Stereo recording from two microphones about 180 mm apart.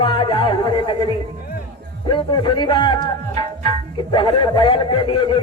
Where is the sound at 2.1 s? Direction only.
25° left (ahead or behind).